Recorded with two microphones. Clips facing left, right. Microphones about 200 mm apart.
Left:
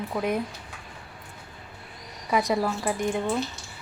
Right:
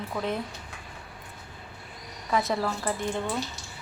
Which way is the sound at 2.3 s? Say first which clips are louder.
Left 3 dB; 15° left (ahead or behind).